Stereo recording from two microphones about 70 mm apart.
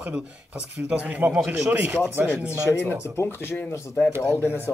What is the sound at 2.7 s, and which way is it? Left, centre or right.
Speech, left.